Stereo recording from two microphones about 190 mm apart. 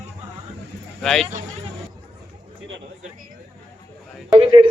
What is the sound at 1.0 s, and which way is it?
Speech, centre (ahead or behind).